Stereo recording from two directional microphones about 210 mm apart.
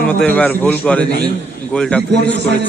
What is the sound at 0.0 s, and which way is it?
A man's voice, 5° left (ahead or behind).